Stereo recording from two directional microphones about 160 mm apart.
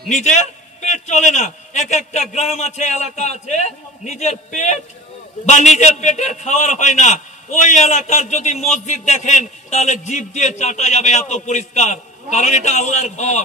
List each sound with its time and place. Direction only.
0.1 s a man's voice: 45° left (ahead or behind)